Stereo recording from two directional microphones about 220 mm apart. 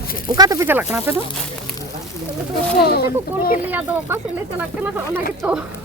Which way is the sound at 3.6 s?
10° right (ahead or behind).